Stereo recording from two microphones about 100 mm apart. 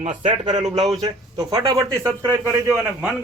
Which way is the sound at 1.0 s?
35° right (ahead or behind).